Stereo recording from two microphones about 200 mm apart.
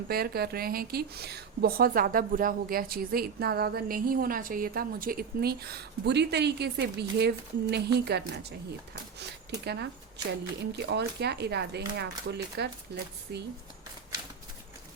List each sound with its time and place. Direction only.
0.1 s a woman's voice: 50° right (ahead or behind)